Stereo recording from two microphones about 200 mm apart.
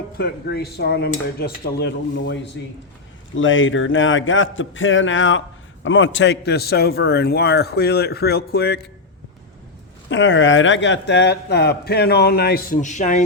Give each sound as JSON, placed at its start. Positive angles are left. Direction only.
{"t": 0.2, "sound": "speech", "side_deg": 55}
{"t": 3.3, "sound": "a man's voice", "side_deg": 75}
{"t": 10.1, "sound": "speech", "side_deg": 65}